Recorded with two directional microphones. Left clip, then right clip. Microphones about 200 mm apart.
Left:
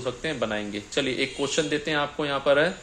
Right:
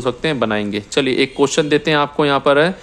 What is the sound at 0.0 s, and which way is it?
A man's voice, 40° right (ahead or behind).